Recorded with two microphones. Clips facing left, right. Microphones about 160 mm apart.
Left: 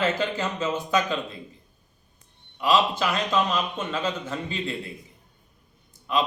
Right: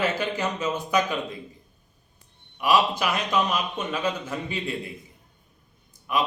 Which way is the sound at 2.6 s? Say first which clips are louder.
Even; 15° right (ahead or behind).